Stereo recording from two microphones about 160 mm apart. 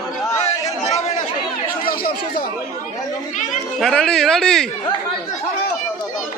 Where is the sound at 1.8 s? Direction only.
65° left (ahead or behind).